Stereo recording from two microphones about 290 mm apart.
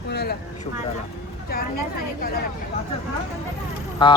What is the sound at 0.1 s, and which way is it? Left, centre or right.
Vehicle, left.